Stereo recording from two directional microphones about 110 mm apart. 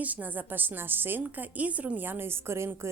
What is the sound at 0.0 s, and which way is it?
A woman's voice, 15° right (ahead or behind).